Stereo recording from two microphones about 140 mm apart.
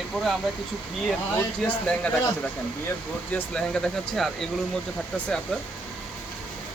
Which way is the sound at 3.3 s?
5° left (ahead or behind).